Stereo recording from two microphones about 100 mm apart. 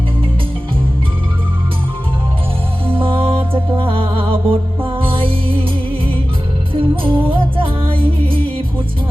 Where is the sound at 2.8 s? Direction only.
60° right (ahead or behind).